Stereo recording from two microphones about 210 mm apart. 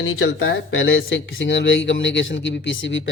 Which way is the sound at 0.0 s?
80° left.